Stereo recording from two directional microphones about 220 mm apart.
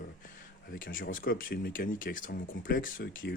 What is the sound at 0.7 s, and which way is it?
Speech, 40° left (ahead or behind).